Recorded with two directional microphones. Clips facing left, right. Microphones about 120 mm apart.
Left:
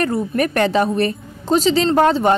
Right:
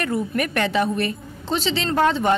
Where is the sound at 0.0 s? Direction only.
40° left (ahead or behind).